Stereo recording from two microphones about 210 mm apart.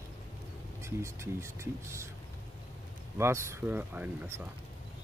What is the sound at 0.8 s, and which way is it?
Speech, 15° right (ahead or behind).